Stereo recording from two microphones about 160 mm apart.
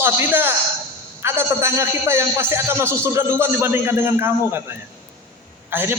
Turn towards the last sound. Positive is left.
turn(degrees=-15)  # may be behind; listen again after turning